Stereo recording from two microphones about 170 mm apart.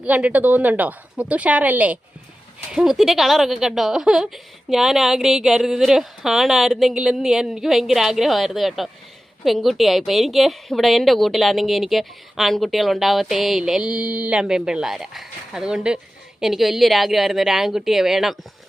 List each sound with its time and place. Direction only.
0.0 s a woman's voice: 10° right (ahead or behind)